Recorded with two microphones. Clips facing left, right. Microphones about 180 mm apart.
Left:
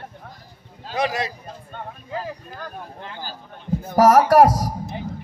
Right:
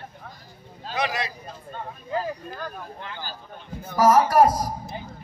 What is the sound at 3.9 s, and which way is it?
Speech, 75° left (ahead or behind).